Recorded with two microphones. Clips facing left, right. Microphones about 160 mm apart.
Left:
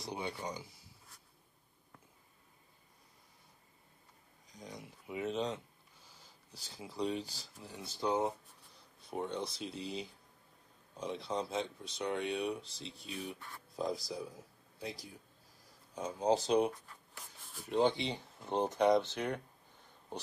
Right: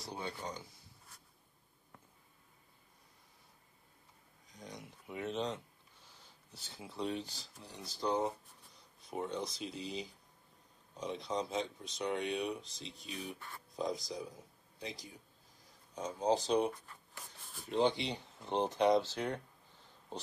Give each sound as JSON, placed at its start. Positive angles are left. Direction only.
{"t": 0.0, "sound": "speech", "side_deg": 15}
{"t": 4.5, "sound": "speech", "side_deg": 0}
{"t": 18.9, "sound": "speech", "side_deg": 20}